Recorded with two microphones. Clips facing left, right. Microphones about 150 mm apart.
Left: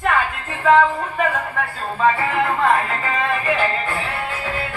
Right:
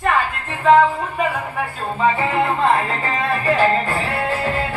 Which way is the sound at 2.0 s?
25° right (ahead or behind).